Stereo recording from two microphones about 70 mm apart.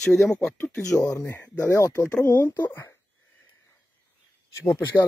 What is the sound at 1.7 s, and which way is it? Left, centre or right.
Speech, left.